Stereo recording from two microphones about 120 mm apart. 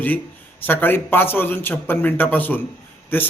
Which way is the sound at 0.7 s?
15° left (ahead or behind).